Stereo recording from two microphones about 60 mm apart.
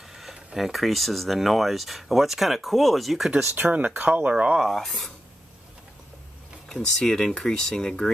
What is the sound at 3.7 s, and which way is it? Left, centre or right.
Speech, right.